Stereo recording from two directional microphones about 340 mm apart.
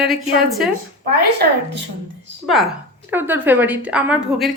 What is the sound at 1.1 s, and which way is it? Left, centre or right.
Speech, right.